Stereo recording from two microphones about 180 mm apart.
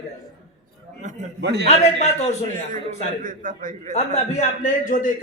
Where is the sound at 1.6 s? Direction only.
40° left (ahead or behind).